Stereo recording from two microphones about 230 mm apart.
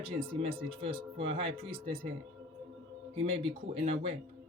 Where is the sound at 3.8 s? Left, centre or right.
Right.